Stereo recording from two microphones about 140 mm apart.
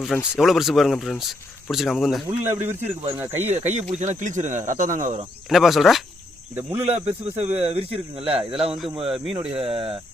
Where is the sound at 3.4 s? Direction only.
50° right (ahead or behind).